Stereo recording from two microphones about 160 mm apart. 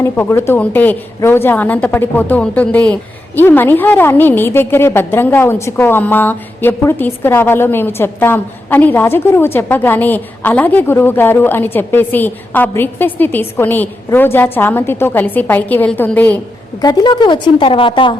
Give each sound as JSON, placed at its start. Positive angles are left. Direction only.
{"t": 0.0, "sound": "a woman's voice", "side_deg": 15}
{"t": 16.8, "sound": "a woman's voice", "side_deg": 25}